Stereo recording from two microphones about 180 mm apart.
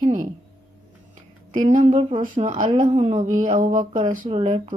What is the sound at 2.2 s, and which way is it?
Speech, 40° right (ahead or behind).